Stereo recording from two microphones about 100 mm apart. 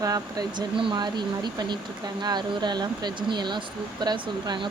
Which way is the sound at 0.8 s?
50° right (ahead or behind).